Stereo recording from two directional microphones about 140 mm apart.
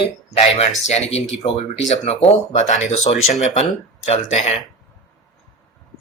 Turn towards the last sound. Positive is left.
turn(degrees=55)  # may be behind; listen again after turning